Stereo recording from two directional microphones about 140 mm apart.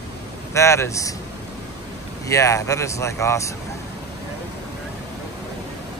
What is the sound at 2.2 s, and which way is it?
Speech, 20° left (ahead or behind).